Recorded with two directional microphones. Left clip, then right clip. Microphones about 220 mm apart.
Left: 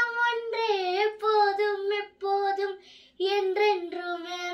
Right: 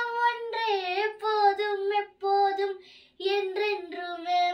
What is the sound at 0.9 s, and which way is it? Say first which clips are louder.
Child singing: left 3 dB; 15° right (ahead or behind).